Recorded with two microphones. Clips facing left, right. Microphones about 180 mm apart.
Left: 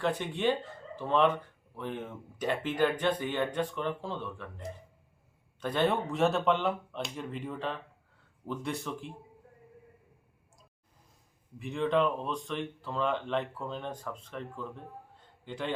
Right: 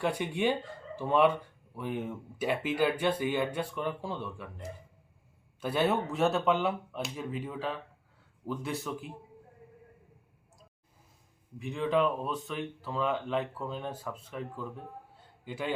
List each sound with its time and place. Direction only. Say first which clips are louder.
0.0 s speech: even; 10° right (ahead or behind)
11.6 s speech: even; centre (ahead or behind)